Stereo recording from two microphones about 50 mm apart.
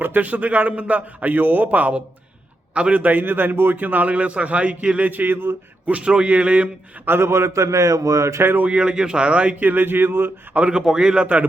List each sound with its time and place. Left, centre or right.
0.0 s a man's voice: right
6.0 s speech: centre
7.0 s a man's voice: right
8.4 s speech: right
8.6 s speech: right
9.6 s speech: right
10.5 s speech: right